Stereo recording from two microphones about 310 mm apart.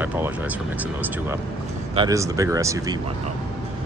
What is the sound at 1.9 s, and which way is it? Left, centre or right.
Speech, centre.